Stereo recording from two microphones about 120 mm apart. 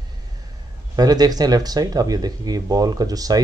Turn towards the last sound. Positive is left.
turn(degrees=-30)  # may be behind; listen again after turning